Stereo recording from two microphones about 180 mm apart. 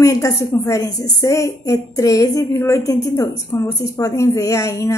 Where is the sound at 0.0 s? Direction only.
15° left (ahead or behind).